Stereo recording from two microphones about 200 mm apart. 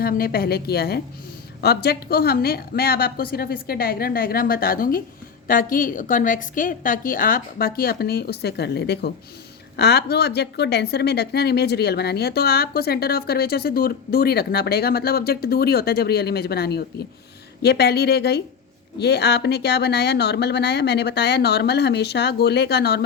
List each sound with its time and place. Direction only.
0.0 s a woman's voice: 50° left (ahead or behind)